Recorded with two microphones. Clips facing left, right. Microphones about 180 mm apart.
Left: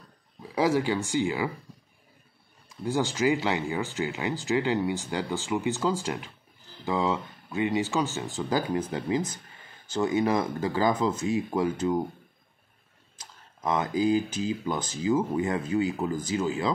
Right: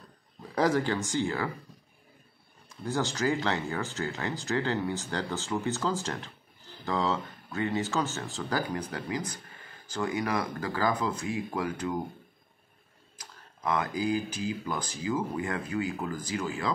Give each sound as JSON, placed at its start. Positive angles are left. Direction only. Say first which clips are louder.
{"t": 0.4, "sound": "speech", "louder": "left 2 dB", "side_deg": 5}
{"t": 2.8, "sound": "speech", "louder": "left 4 dB", "side_deg": 15}
{"t": 13.2, "sound": "speech", "louder": "left 2 dB", "side_deg": 25}